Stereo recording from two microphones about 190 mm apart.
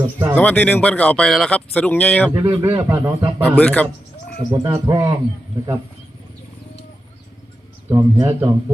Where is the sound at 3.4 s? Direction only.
10° left (ahead or behind).